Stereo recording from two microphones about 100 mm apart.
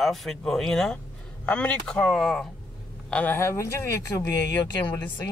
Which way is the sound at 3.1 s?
20° left (ahead or behind).